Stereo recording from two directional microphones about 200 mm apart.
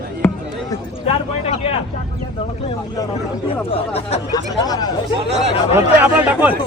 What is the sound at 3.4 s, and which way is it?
Speech, 30° left (ahead or behind).